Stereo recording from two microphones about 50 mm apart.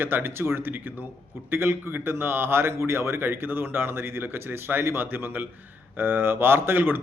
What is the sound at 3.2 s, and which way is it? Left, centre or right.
A man's voice, right.